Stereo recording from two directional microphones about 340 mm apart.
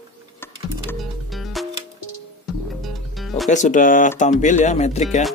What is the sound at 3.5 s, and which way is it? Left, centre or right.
Speech, left.